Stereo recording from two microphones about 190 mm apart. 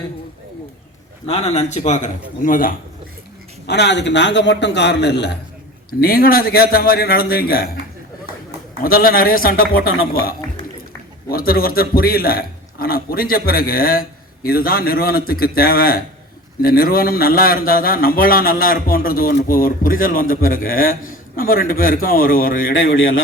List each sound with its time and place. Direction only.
1.3 s speech: 35° left (ahead or behind)
3.7 s a man's voice: 65° left (ahead or behind)
5.9 s speech: 50° left (ahead or behind)
8.8 s speech: 50° left (ahead or behind)
11.3 s speech: 50° left (ahead or behind)
22.7 s a sound: 90° left